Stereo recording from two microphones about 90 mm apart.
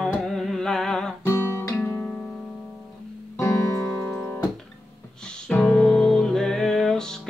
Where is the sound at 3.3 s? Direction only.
35° left (ahead or behind).